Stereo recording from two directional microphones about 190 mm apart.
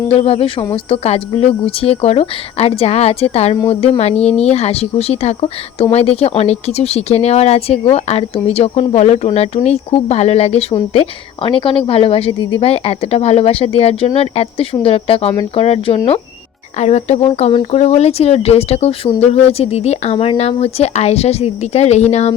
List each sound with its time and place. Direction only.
0.1 s speech: 30° left (ahead or behind)